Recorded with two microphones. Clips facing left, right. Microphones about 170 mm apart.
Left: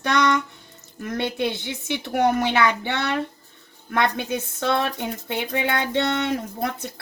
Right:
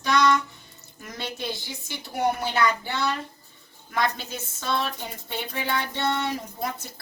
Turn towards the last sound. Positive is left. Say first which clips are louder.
# left 4 dB
turn(degrees=60)  # may be behind; listen again after turning